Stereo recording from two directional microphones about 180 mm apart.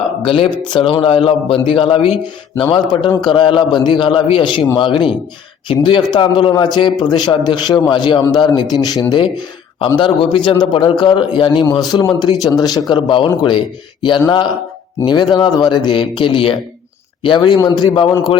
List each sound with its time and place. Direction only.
0.3 s a man's voice: 30° left (ahead or behind)